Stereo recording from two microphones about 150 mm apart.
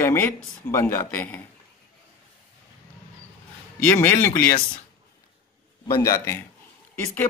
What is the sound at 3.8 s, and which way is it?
Speech, 15° left (ahead or behind).